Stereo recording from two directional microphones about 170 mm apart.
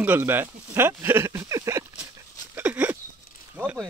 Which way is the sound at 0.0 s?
10° right (ahead or behind).